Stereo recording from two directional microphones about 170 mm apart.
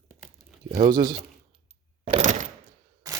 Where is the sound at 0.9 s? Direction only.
25° right (ahead or behind).